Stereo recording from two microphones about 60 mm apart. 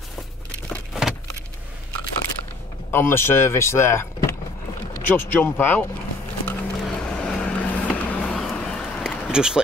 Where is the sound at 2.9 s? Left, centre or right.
Left.